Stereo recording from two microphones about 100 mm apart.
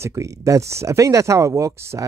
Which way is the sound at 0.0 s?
30° right (ahead or behind).